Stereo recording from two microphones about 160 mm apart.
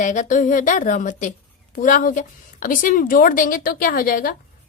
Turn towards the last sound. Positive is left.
turn(degrees=65)  # may be behind; listen again after turning